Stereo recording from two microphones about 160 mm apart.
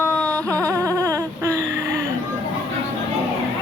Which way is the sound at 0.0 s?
10° left (ahead or behind).